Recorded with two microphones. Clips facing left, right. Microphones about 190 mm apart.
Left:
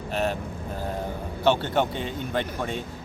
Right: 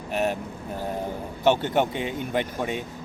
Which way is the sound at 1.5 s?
15° right (ahead or behind).